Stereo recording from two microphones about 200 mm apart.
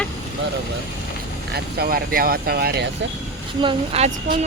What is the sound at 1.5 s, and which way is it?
Speech, 50° right (ahead or behind).